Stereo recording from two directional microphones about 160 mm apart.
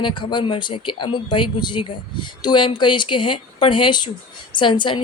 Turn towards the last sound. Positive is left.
turn(degrees=30)  # may be behind; listen again after turning